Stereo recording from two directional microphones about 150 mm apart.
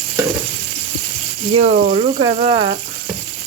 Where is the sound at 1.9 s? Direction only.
35° right (ahead or behind).